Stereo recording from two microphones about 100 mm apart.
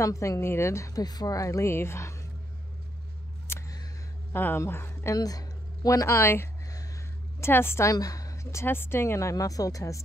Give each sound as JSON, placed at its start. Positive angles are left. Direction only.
{"t": 0.0, "sound": "speech", "side_deg": 30}
{"t": 3.4, "sound": "a sound", "side_deg": 30}
{"t": 4.3, "sound": "speech", "side_deg": 20}
{"t": 5.1, "sound": "a woman's voice", "side_deg": 40}
{"t": 7.9, "sound": "speech", "side_deg": 35}